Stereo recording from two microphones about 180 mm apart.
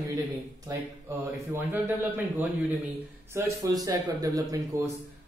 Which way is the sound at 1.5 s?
10° right (ahead or behind).